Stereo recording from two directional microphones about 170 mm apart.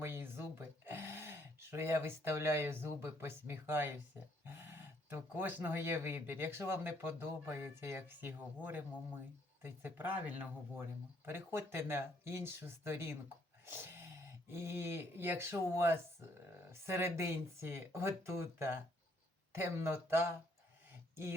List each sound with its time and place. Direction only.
0.0 s a sound: 15° right (ahead or behind)
0.9 s speech: 15° right (ahead or behind)
13.7 s dog: 15° right (ahead or behind)
14.5 s speech: 15° right (ahead or behind)
19.6 s speech: 15° right (ahead or behind)